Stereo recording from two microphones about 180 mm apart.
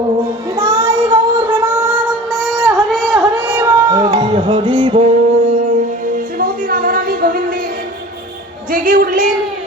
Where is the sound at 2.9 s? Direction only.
5° right (ahead or behind).